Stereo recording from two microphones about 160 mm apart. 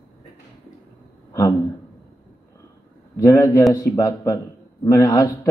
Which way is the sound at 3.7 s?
25° left (ahead or behind).